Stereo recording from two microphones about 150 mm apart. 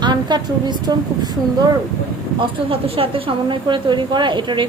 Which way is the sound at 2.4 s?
35° right (ahead or behind).